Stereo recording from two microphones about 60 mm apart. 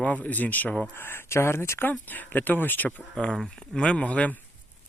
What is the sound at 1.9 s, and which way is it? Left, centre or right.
Speech, left.